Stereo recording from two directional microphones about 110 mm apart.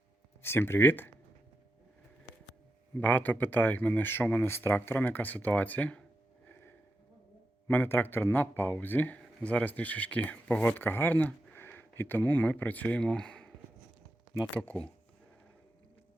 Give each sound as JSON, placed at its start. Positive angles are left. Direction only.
{"t": 0.4, "sound": "speech", "side_deg": 20}
{"t": 3.0, "sound": "speech", "side_deg": 15}
{"t": 7.7, "sound": "speech", "side_deg": 20}
{"t": 14.5, "sound": "speech", "side_deg": 15}